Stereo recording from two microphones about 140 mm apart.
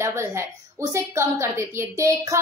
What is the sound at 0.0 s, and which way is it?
A woman's voice, 20° right (ahead or behind).